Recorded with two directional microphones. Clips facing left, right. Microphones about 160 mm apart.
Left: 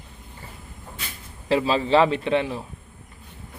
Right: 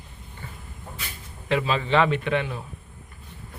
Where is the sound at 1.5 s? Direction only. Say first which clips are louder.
Left 4 dB; 30° left (ahead or behind).